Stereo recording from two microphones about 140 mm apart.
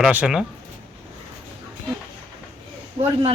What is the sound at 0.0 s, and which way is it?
Speech, 5° right (ahead or behind).